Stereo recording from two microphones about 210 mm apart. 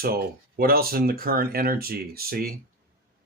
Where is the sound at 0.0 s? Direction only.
45° right (ahead or behind).